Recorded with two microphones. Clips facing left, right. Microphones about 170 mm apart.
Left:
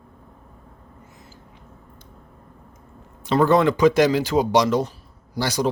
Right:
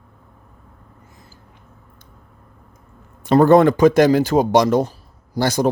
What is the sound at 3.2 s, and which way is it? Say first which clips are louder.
Speech: right 6 dB; 50° right (ahead or behind).